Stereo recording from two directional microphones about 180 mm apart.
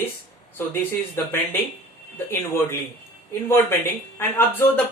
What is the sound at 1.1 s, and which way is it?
Speech, 10° left (ahead or behind).